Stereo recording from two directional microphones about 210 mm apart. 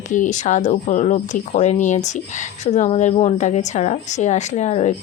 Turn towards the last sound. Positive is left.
turn(degrees=30)  # may be behind; listen again after turning